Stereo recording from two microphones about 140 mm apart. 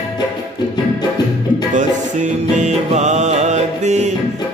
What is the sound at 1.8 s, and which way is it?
Music, 60° right (ahead or behind).